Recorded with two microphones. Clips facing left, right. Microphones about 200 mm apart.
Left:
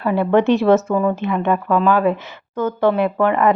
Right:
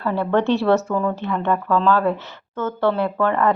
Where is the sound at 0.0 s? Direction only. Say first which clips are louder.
Left 4 dB; 15° left (ahead or behind).